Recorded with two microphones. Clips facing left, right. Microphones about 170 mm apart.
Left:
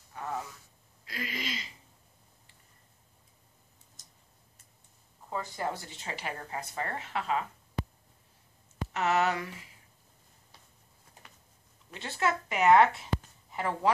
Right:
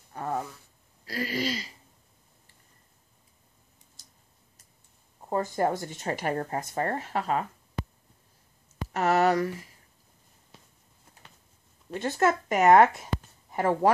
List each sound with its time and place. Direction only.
0.1 s a sound: 45° right (ahead or behind)
1.0 s speech: 35° right (ahead or behind)
5.3 s speech: 45° right (ahead or behind)
8.9 s speech: 40° right (ahead or behind)
11.9 s speech: 45° right (ahead or behind)